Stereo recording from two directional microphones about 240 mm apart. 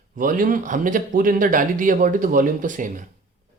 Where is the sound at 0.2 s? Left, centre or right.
Right.